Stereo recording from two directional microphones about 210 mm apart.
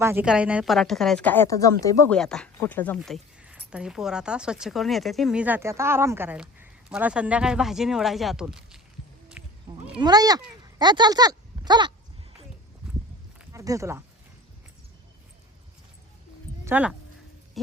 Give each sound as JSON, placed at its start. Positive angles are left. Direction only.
{"t": 0.0, "sound": "speech", "side_deg": -10}
{"t": 2.1, "sound": "speech", "side_deg": 5}
{"t": 9.4, "sound": "sheep", "side_deg": -5}
{"t": 10.0, "sound": "speech", "side_deg": -20}
{"t": 13.4, "sound": "speech", "side_deg": -15}
{"t": 16.6, "sound": "speech", "side_deg": -10}